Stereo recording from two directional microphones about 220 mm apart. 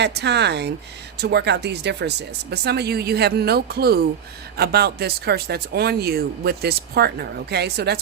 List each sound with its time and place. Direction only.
0.0 s speech: 50° right (ahead or behind)